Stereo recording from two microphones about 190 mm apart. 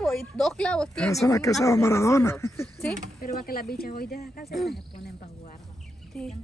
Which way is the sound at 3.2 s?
50° left (ahead or behind).